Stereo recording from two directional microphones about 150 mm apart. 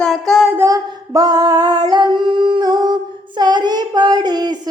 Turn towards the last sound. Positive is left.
turn(degrees=-25)  # may be behind; listen again after turning